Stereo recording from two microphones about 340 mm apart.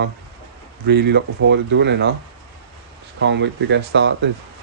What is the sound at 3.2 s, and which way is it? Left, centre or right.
Speech, right.